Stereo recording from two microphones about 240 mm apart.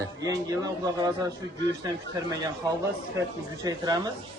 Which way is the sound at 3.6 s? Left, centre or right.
Centre.